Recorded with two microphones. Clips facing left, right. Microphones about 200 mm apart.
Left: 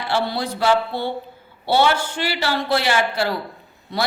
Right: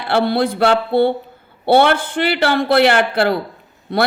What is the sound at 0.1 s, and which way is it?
A woman's voice, 55° right (ahead or behind).